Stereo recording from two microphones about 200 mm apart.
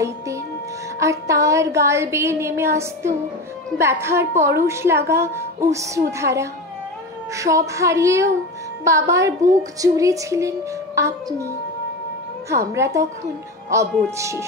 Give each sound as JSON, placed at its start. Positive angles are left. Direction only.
{"t": 0.9, "sound": "a woman's voice", "side_deg": -15}
{"t": 12.7, "sound": "a woman's voice", "side_deg": -15}